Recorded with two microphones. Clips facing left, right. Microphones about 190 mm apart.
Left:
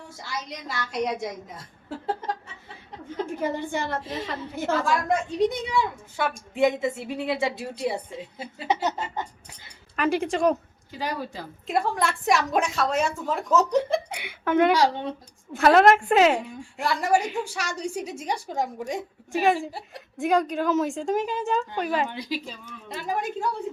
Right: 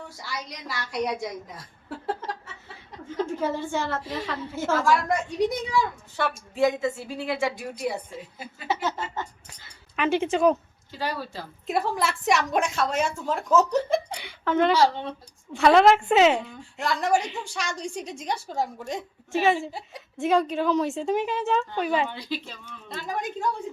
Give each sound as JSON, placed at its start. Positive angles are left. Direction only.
{"t": 0.3, "sound": "a woman's voice", "side_deg": 20}
{"t": 2.0, "sound": "a sound", "side_deg": 20}
{"t": 3.2, "sound": "a woman's voice", "side_deg": 15}
{"t": 6.5, "sound": "a woman's voice", "side_deg": 20}
{"t": 9.9, "sound": "a woman's voice", "side_deg": 0}
{"t": 10.9, "sound": "a woman's voice", "side_deg": 15}
{"t": 11.6, "sound": "a woman's voice", "side_deg": 0}
{"t": 14.2, "sound": "a woman's voice", "side_deg": 15}
{"t": 15.5, "sound": "a woman's voice", "side_deg": 0}
{"t": 19.3, "sound": "a woman's voice", "side_deg": 0}
{"t": 21.2, "sound": "speech", "side_deg": 40}
{"t": 21.4, "sound": "a woman's voice", "side_deg": 0}
{"t": 22.1, "sound": "a woman's voice", "side_deg": 15}